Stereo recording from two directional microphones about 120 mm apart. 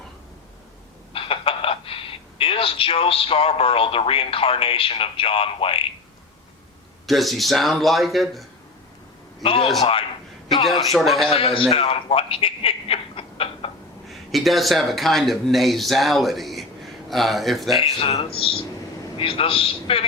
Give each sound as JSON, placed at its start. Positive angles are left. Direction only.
{"t": 1.1, "sound": "speech", "side_deg": 50}
{"t": 7.1, "sound": "speech", "side_deg": 0}
{"t": 9.4, "sound": "speech", "side_deg": 50}
{"t": 10.9, "sound": "speech", "side_deg": 0}
{"t": 11.3, "sound": "speech", "side_deg": 50}
{"t": 11.7, "sound": "a sound", "side_deg": 50}
{"t": 14.1, "sound": "speech", "side_deg": 0}
{"t": 17.8, "sound": "a man's voice", "side_deg": 60}